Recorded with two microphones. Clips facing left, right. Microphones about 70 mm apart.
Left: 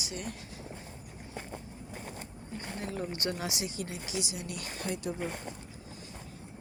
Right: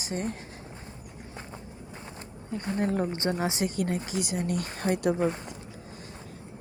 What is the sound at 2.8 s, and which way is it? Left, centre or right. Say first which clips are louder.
Speech: right 9 dB; right.